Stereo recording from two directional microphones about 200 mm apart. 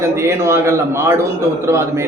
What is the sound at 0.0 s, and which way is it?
A man's voice, 15° right (ahead or behind).